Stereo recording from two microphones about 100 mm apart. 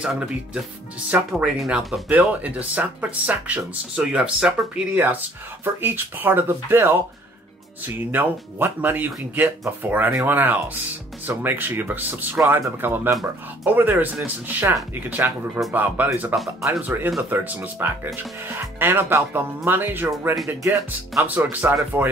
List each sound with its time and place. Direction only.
0.0 s speech: 5° right (ahead or behind)
1.1 s speech: 15° right (ahead or behind)
1.7 s speech: centre (ahead or behind)
2.0 s speech: 15° right (ahead or behind)